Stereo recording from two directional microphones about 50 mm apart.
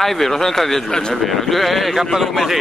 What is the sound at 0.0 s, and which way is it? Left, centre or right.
Speech, centre.